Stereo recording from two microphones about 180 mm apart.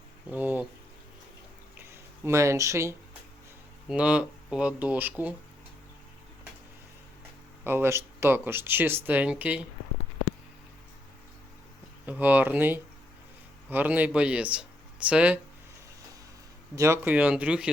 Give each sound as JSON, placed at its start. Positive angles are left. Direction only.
{"t": 0.3, "sound": "speech", "side_deg": -10}
{"t": 1.8, "sound": "a sound", "side_deg": -15}
{"t": 3.8, "sound": "speech", "side_deg": -5}
{"t": 7.6, "sound": "speech", "side_deg": -10}
{"t": 12.0, "sound": "speech", "side_deg": -10}
{"t": 16.7, "sound": "speech", "side_deg": -15}